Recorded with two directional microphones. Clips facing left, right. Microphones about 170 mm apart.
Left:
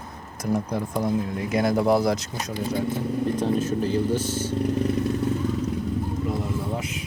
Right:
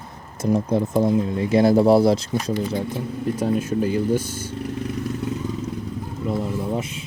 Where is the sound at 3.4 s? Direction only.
10° right (ahead or behind).